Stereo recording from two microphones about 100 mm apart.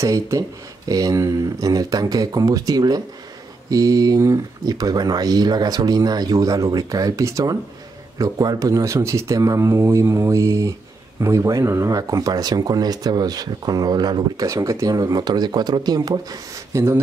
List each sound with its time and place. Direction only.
0.0 s speech: 30° right (ahead or behind)